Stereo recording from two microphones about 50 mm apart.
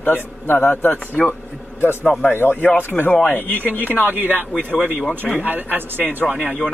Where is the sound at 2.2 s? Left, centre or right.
Left.